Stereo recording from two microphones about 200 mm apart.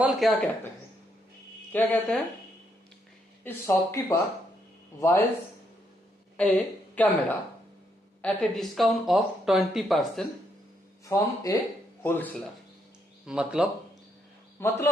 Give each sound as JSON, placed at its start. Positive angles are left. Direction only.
{"t": 0.0, "sound": "speech", "side_deg": 0}
{"t": 1.7, "sound": "speech", "side_deg": 5}
{"t": 3.4, "sound": "speech", "side_deg": 15}
{"t": 6.9, "sound": "speech", "side_deg": 10}
{"t": 11.0, "sound": "speech", "side_deg": 15}
{"t": 13.2, "sound": "speech", "side_deg": -5}
{"t": 14.6, "sound": "speech", "side_deg": 10}